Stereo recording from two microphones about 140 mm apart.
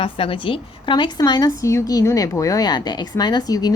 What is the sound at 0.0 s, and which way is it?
A woman's voice, 40° left (ahead or behind).